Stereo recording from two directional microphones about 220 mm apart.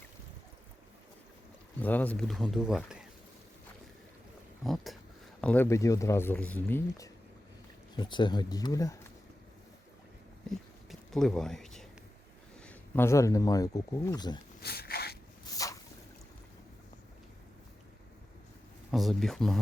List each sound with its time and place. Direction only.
1.8 s speech: 5° left (ahead or behind)
4.6 s speech: centre (ahead or behind)
10.8 s speech: centre (ahead or behind); by 14.3 s 15° left (ahead or behind)
14.6 s a sound: 45° left (ahead or behind)
15.5 s boat: 15° left (ahead or behind)
18.9 s speech: centre (ahead or behind)